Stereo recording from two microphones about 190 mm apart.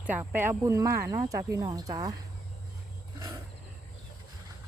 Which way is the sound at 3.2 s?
15° right (ahead or behind).